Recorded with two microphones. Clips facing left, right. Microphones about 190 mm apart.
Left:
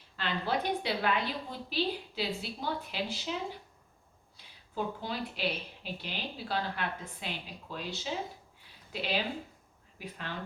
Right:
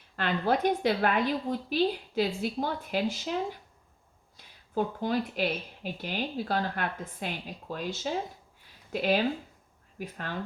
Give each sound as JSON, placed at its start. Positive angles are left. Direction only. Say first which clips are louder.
{"t": 0.2, "sound": "speech", "louder": "right 6 dB", "side_deg": -50}
{"t": 4.7, "sound": "speech", "louder": "right 7 dB", "side_deg": -50}